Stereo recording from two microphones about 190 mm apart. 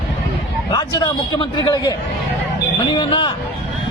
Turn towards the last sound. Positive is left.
turn(degrees=25)  # may be behind; listen again after turning